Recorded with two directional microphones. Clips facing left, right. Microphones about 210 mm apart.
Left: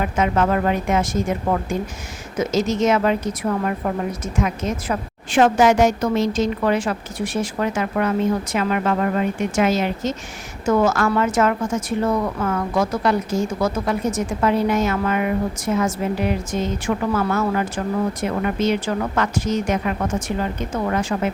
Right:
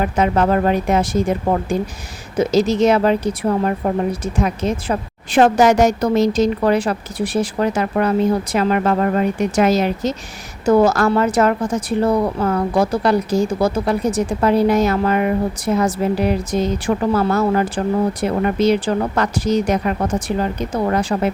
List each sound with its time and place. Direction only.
0.0 s a woman's voice: 35° right (ahead or behind)